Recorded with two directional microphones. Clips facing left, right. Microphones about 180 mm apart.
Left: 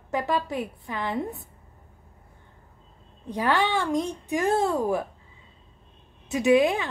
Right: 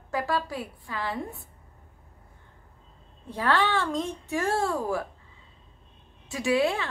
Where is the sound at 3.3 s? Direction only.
15° left (ahead or behind).